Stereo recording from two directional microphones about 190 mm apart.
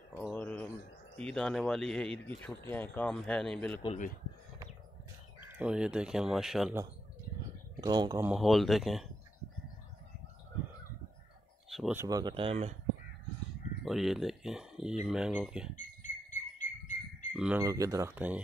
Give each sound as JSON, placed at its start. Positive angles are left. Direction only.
{"t": 0.3, "sound": "a sound", "side_deg": 5}
{"t": 1.1, "sound": "speech", "side_deg": 5}
{"t": 5.4, "sound": "speech", "side_deg": -10}
{"t": 7.8, "sound": "speech", "side_deg": -20}
{"t": 8.3, "sound": "speech", "side_deg": 0}
{"t": 11.7, "sound": "speech", "side_deg": 0}
{"t": 12.0, "sound": "speech", "side_deg": -20}
{"t": 13.8, "sound": "speech", "side_deg": 0}
{"t": 15.7, "sound": "bird", "side_deg": 40}
{"t": 17.3, "sound": "speech", "side_deg": -5}